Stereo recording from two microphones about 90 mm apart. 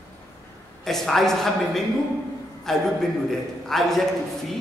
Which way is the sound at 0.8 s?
5° left (ahead or behind).